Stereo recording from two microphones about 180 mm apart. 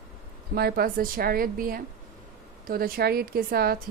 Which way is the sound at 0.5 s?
60° right (ahead or behind).